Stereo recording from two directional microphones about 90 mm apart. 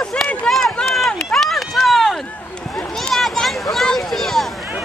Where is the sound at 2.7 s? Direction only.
5° left (ahead or behind).